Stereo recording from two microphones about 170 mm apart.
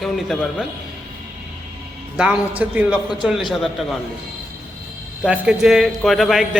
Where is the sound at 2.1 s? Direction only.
5° right (ahead or behind).